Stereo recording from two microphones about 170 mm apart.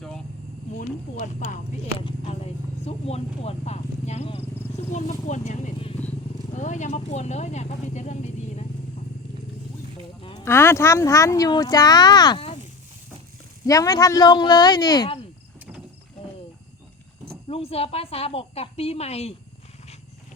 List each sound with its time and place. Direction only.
0.8 s speech: 50° left (ahead or behind)
2.0 s speech: 35° left (ahead or behind)
10.2 s a sound: 35° left (ahead or behind)
10.4 s speech: 15° left (ahead or behind)
13.7 s speech: 20° left (ahead or behind)
17.5 s a woman's voice: 35° left (ahead or behind)